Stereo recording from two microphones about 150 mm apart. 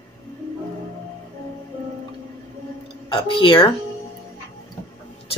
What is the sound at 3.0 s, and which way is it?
Speech, 35° left (ahead or behind).